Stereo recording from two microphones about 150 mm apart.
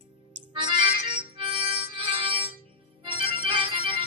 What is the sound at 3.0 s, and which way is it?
Music, 35° right (ahead or behind).